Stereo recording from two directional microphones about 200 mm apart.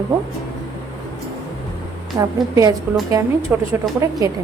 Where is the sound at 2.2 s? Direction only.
20° right (ahead or behind).